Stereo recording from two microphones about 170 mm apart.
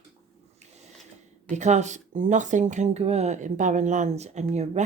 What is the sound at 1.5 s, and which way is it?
Speech, 45° right (ahead or behind).